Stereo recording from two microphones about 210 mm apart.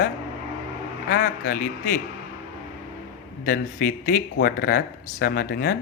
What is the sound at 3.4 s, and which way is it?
Speech, 45° left (ahead or behind).